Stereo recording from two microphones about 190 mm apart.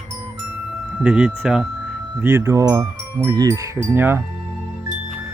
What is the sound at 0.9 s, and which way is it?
Speech, 5° right (ahead or behind).